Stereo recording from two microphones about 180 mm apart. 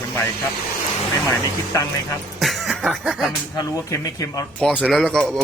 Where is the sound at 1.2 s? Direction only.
15° left (ahead or behind).